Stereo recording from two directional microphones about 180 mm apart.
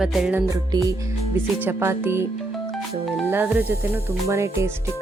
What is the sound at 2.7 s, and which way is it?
Music, centre (ahead or behind).